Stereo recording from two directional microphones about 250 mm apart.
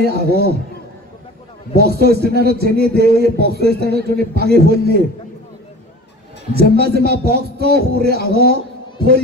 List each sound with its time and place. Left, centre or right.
0.0 s a man's voice: right
1.8 s a man's voice: right
6.5 s a man's voice: right